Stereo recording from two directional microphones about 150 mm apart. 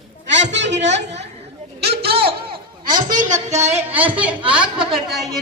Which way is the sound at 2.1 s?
35° right (ahead or behind).